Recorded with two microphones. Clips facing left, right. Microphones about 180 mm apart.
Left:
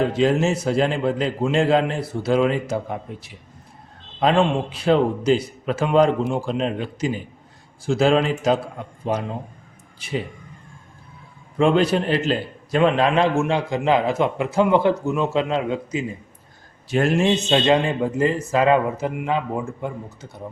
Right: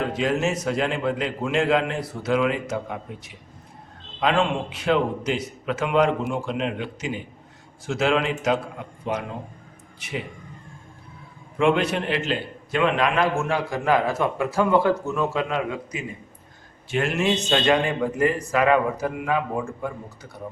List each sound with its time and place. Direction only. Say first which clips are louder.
0.0 s a man's voice: left 5 dB; 30° left (ahead or behind)
11.5 s a man's voice: left 3 dB; 35° left (ahead or behind)
13.3 s a man's voice: left 4 dB; 20° left (ahead or behind)